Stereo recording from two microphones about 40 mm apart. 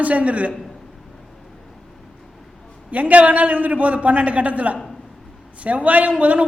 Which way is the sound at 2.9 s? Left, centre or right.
Right.